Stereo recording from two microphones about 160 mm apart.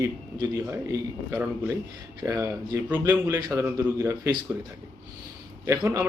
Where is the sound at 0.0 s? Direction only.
20° right (ahead or behind).